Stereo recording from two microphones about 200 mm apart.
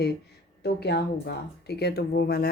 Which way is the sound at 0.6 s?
55° left (ahead or behind).